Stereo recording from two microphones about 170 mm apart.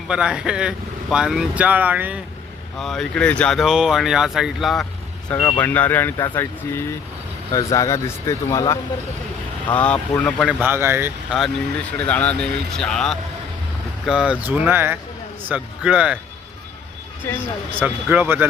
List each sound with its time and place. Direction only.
0.1 s speech: 5° right (ahead or behind)
2.7 s speech: centre (ahead or behind); by 8.8 s 20° left (ahead or behind)
9.7 s speech: 10° left (ahead or behind)
10.6 s speech: 15° right (ahead or behind)
11.3 s speech: 5° left (ahead or behind)
17.7 s speech: 10° right (ahead or behind)